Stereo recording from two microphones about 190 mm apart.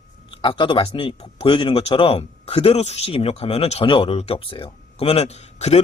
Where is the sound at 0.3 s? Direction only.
25° left (ahead or behind).